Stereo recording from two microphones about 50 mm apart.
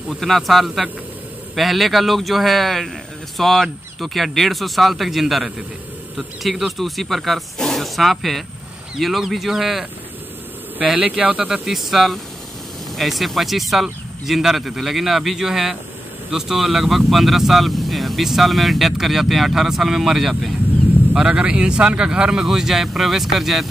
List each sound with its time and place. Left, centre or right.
0.1 s speech: centre
11.4 s speech: centre
21.1 s speech: centre